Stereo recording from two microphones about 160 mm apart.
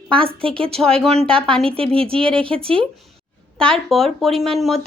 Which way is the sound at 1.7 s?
35° right (ahead or behind).